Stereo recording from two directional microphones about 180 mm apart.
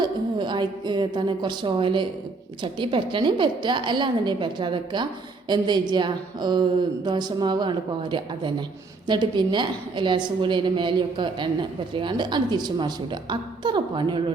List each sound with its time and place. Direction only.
0.0 s a woman's voice: 25° right (ahead or behind)